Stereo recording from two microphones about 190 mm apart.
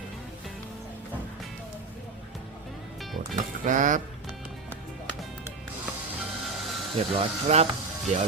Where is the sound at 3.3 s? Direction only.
40° right (ahead or behind).